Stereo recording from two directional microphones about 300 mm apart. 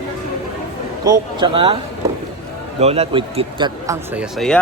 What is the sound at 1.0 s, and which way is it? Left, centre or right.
Speech, centre.